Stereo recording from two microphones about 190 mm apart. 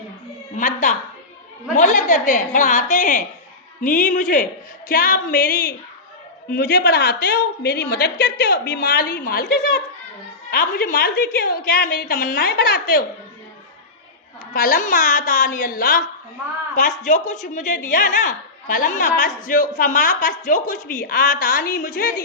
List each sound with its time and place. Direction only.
0.5 s a woman's voice: 40° left (ahead or behind)
14.5 s a woman's voice: 50° left (ahead or behind)